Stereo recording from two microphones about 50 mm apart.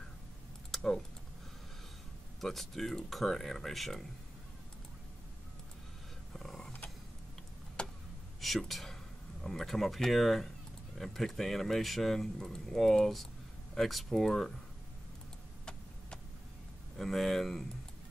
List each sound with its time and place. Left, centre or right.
0.7 s typing: centre
2.4 s speech: centre
6.3 s a sound: centre
7.8 s a sound: centre
8.4 s speech: centre
16.9 s speech: centre